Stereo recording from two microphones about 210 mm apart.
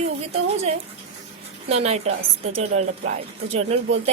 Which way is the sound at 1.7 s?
30° right (ahead or behind).